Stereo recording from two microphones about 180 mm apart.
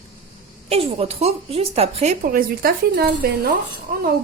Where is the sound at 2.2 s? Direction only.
55° right (ahead or behind).